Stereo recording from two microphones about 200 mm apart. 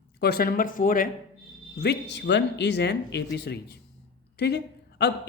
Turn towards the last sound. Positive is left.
turn(degrees=55)  # may be behind; listen again after turning